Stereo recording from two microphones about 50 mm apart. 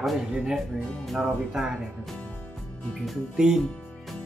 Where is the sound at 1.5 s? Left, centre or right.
Centre.